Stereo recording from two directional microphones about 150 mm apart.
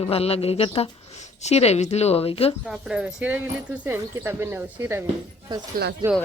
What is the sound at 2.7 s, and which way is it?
Speech, 5° right (ahead or behind).